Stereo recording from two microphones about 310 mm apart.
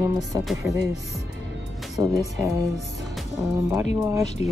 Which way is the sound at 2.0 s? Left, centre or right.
Centre.